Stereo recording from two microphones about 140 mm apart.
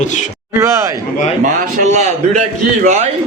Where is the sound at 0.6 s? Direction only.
20° right (ahead or behind).